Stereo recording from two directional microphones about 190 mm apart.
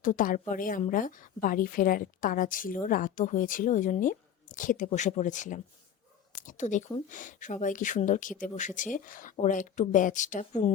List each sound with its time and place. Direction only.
0.0 s a woman's voice: 45° left (ahead or behind)